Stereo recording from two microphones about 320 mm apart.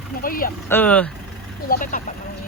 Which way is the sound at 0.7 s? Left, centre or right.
Centre.